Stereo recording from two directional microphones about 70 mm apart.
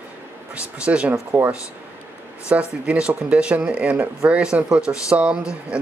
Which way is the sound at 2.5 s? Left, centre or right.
Centre.